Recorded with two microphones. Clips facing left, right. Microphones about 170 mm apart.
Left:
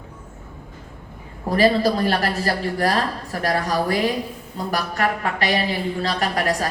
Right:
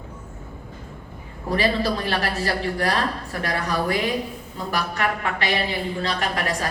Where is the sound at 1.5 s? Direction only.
40° left (ahead or behind).